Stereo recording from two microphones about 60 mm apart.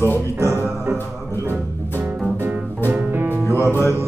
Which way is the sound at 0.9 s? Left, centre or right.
Right.